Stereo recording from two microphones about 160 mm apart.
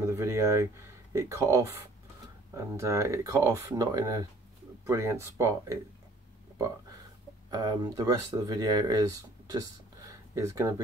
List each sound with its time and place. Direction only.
0.0 s speech: 20° right (ahead or behind)
7.5 s speech: 25° right (ahead or behind)